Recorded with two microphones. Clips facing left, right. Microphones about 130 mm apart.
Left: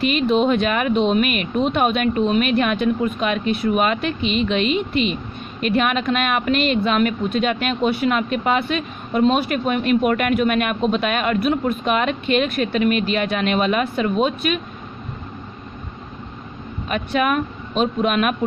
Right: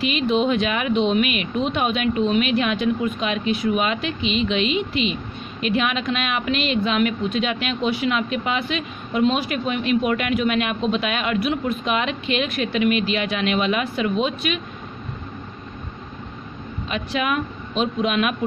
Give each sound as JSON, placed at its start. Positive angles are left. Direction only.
{"t": 0.0, "sound": "a woman's voice", "side_deg": 50}
{"t": 16.9, "sound": "a woman's voice", "side_deg": 50}